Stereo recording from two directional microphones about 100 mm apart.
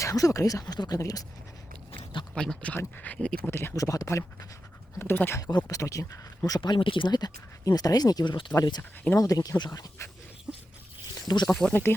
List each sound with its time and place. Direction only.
0.0 s speech: 35° left (ahead or behind)
2.3 s speech: 5° left (ahead or behind)
3.5 s speech: 25° left (ahead or behind)
5.4 s speech: 45° left (ahead or behind)
5.6 s speech: 35° left (ahead or behind)
6.6 s speech: 55° left (ahead or behind)
10.5 s a sound: 10° right (ahead or behind)
11.3 s speech: 45° left (ahead or behind)
11.7 s speech: 20° left (ahead or behind)